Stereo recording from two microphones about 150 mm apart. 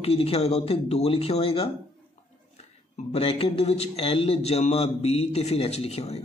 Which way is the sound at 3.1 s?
40° left (ahead or behind).